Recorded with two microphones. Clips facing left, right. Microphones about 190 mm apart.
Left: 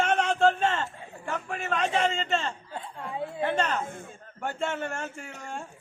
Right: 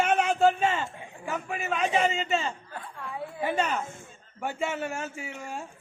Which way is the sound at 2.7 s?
25° left (ahead or behind).